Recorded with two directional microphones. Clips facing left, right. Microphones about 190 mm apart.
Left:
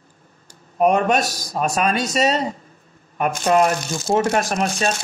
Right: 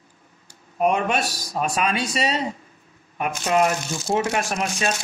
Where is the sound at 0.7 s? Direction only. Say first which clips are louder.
Left 4 dB; 40° left (ahead or behind).